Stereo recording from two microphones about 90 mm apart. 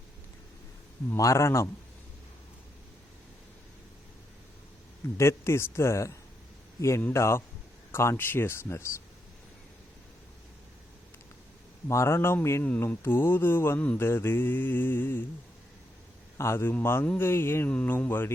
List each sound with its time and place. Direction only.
1.1 s speech: 35° left (ahead or behind)
5.1 s speech: 30° left (ahead or behind)
7.1 s mantra: 30° left (ahead or behind)
11.9 s speech: 30° left (ahead or behind)
12.6 s mantra: 20° left (ahead or behind)
16.4 s mantra: 30° left (ahead or behind)